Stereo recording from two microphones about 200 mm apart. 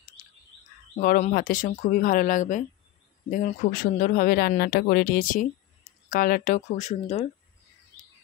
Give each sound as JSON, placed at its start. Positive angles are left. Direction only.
{"t": 0.2, "sound": "bird", "side_deg": 45}
{"t": 0.9, "sound": "speech", "side_deg": 35}